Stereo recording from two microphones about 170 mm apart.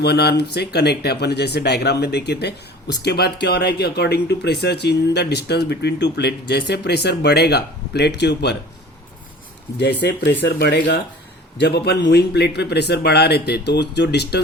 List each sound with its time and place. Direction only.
0.0 s speech: 75° left (ahead or behind)
10.0 s speech: 75° left (ahead or behind)